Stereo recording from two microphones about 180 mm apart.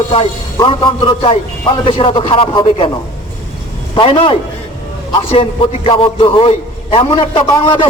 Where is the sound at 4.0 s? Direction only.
30° left (ahead or behind).